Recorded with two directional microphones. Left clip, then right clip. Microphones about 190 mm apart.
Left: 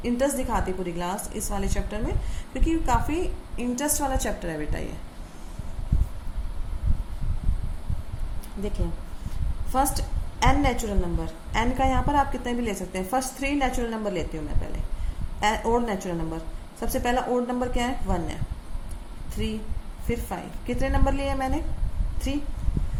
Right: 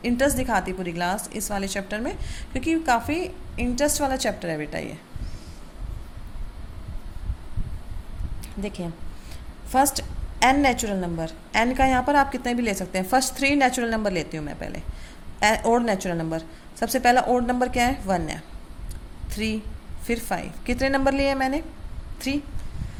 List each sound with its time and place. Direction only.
0.0 s a woman's voice: 50° right (ahead or behind)
9.7 s a woman's voice: 50° right (ahead or behind)